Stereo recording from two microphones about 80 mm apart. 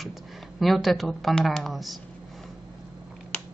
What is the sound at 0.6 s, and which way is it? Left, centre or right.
A woman's voice, centre.